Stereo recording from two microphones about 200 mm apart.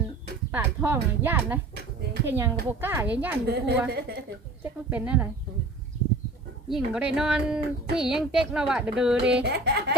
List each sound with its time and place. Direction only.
0.5 s a woman's voice: 10° right (ahead or behind)
3.4 s speech: 55° right (ahead or behind)
4.6 s a woman's voice: 10° right (ahead or behind)
6.7 s a child's voice: 5° right (ahead or behind)
9.4 s speech: 55° right (ahead or behind)